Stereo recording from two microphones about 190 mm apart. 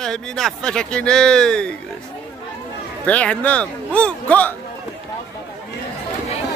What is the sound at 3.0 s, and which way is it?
Speech, 5° left (ahead or behind).